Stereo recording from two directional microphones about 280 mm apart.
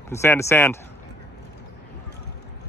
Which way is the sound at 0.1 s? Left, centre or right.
Centre.